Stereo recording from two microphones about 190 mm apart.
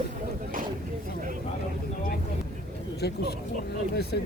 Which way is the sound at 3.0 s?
60° left (ahead or behind).